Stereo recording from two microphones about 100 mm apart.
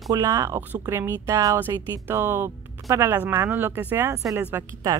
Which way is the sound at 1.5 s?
20° right (ahead or behind).